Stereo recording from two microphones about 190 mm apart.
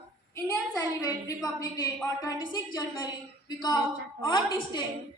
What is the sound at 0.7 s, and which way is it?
A woman's voice, 20° left (ahead or behind).